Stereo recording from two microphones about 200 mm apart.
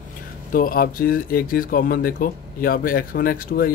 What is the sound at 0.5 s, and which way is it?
Speech, 45° left (ahead or behind).